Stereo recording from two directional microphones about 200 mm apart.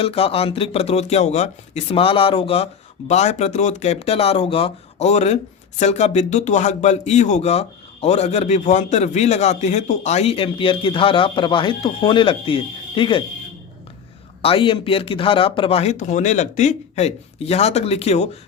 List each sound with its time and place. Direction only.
0.0 s a man's voice: 30° left (ahead or behind)
14.4 s speech: 25° left (ahead or behind)